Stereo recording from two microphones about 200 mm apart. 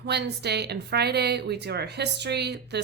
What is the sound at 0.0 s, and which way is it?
Speech, 55° right (ahead or behind).